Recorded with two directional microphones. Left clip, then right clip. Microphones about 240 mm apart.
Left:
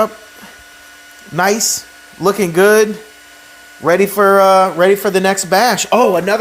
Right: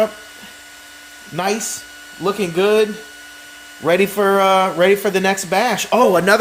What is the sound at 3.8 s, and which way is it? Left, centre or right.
Speech, centre.